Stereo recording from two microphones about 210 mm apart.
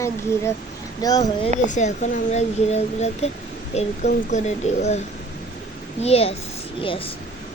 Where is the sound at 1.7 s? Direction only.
35° left (ahead or behind).